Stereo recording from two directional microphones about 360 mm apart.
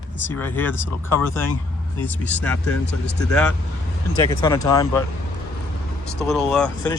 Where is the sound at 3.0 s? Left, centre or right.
Left.